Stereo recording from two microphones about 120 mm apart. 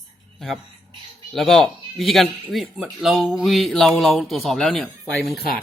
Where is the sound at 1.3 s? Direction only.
Centre (ahead or behind).